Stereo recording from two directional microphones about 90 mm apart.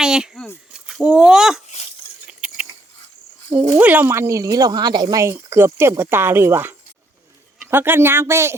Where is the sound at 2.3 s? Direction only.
10° right (ahead or behind).